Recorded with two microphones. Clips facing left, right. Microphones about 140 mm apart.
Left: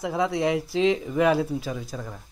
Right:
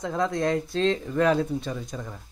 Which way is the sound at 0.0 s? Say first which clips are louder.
Left 1 dB; 5° left (ahead or behind).